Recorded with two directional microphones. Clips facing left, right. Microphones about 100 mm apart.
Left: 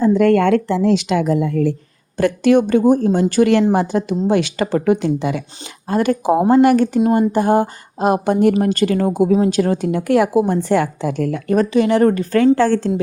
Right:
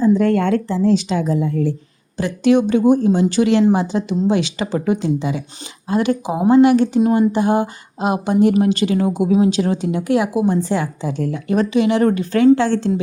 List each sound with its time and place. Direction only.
0.0 s a woman's voice: 60° left (ahead or behind)
2.1 s a woman's voice: 50° left (ahead or behind)
5.9 s a woman's voice: 45° left (ahead or behind)